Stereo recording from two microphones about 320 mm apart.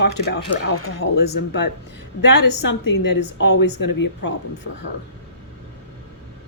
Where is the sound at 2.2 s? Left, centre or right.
Left.